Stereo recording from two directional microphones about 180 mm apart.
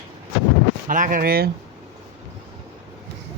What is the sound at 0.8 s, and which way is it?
Speech, 50° right (ahead or behind).